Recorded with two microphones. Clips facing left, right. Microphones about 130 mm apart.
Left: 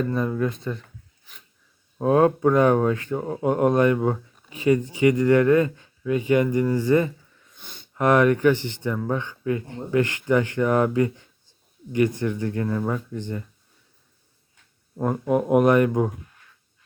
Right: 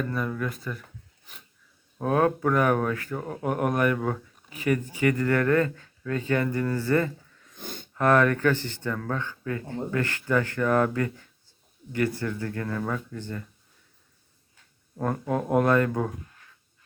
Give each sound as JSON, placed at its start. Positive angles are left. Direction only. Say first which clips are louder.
{"t": 0.0, "sound": "speech", "louder": "left 5 dB", "side_deg": 25}
{"t": 2.0, "sound": "speech", "louder": "left 5 dB", "side_deg": 25}
{"t": 7.5, "sound": "a sound", "louder": "right 8 dB", "side_deg": -45}
{"t": 7.9, "sound": "speech", "louder": "left 3 dB", "side_deg": 15}
{"t": 14.9, "sound": "speech", "louder": "left 5 dB", "side_deg": 10}